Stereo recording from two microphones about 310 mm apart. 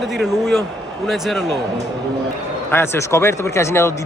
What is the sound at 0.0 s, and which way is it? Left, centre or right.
A man's voice, centre.